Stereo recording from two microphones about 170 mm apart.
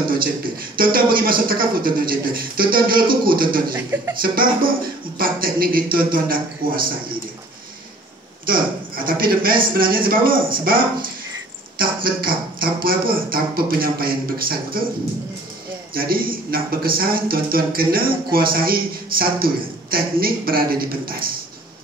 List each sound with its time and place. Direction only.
0.7 s a man's voice: 60° right (ahead or behind)
3.7 s music: 15° right (ahead or behind)
5.2 s a man's voice: 60° right (ahead or behind)
8.5 s a man's voice: 55° right (ahead or behind)